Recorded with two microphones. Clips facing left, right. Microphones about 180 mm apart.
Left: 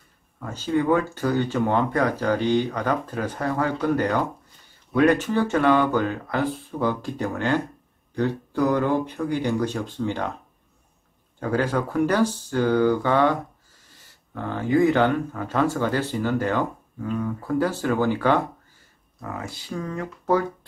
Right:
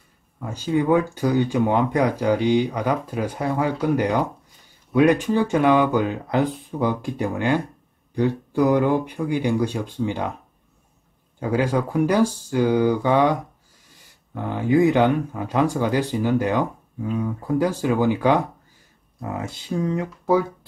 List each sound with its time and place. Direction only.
0.4 s speech: 10° right (ahead or behind)
11.3 s speech: 10° right (ahead or behind)